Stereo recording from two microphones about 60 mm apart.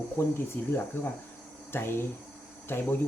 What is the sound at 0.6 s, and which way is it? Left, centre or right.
Speech, left.